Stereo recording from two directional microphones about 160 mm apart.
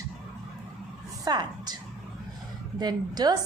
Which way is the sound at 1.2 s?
25° right (ahead or behind).